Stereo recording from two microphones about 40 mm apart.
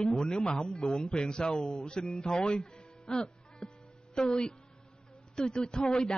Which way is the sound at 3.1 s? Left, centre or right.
Centre.